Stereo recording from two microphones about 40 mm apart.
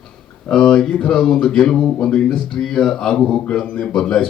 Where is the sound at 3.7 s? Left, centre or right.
Left.